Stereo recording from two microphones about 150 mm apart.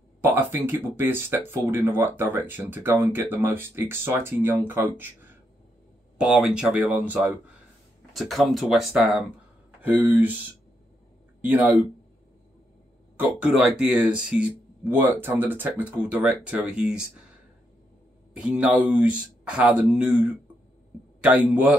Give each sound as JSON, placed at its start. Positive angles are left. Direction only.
{"t": 0.2, "sound": "speech", "side_deg": -15}
{"t": 11.4, "sound": "speech", "side_deg": -10}
{"t": 13.2, "sound": "speech", "side_deg": -10}
{"t": 18.3, "sound": "speech", "side_deg": -10}